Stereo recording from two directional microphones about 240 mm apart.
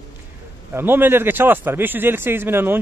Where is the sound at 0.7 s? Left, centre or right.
Centre.